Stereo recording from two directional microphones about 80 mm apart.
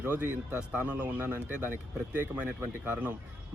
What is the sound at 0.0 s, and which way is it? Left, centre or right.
Speech, right.